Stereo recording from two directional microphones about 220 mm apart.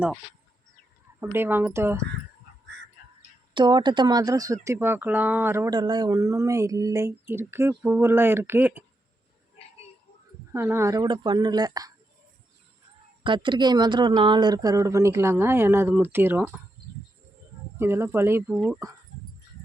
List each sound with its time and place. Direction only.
1.2 s speech: 10° right (ahead or behind)
3.5 s speech: 20° right (ahead or behind)
10.5 s speech: 10° right (ahead or behind)
13.2 s speech: 20° right (ahead or behind)
17.7 s speech: 10° right (ahead or behind)